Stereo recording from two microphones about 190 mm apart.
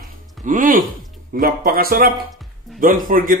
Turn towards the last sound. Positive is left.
turn(degrees=-45)  # may be behind; listen again after turning